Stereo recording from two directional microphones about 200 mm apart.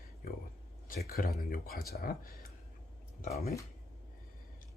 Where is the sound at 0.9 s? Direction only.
50° left (ahead or behind).